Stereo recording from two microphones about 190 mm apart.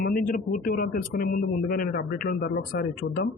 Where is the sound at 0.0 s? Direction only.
50° left (ahead or behind).